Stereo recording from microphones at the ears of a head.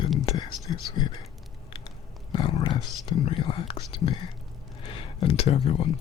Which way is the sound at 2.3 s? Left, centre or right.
Left.